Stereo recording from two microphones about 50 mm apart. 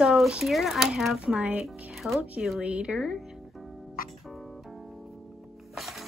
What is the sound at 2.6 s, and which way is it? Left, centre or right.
Speech, right.